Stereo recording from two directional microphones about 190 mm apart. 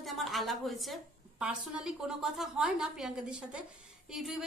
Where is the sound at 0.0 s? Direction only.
Centre (ahead or behind).